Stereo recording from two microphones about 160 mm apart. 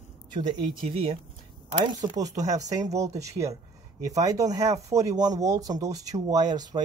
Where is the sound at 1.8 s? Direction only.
25° right (ahead or behind).